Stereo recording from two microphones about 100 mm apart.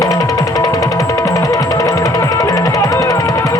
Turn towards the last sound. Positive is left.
turn(degrees=35)  # may be behind; listen again after turning